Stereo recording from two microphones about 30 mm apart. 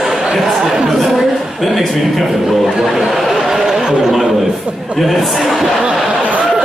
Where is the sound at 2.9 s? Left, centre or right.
Centre.